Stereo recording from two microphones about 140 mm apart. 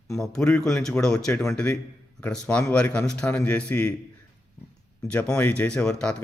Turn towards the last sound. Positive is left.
turn(degrees=5)  # may be behind; listen again after turning